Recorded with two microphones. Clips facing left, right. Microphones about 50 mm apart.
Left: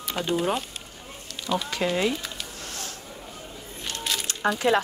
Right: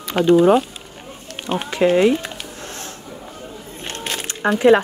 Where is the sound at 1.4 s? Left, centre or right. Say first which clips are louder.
Right 3 dB; right.